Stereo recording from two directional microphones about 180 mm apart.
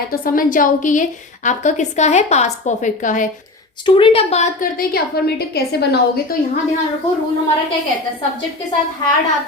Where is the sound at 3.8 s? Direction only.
30° left (ahead or behind).